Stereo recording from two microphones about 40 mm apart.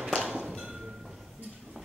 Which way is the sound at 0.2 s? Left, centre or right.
Centre.